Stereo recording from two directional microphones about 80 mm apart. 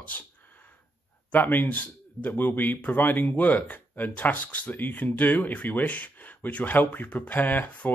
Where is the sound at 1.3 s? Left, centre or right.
Left.